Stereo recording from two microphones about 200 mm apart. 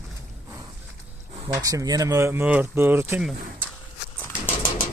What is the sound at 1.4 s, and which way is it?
Speech, 15° right (ahead or behind).